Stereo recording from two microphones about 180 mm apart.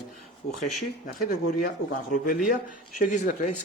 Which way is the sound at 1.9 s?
50° left (ahead or behind).